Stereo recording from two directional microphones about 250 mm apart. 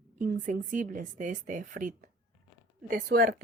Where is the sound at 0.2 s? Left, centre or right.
Right.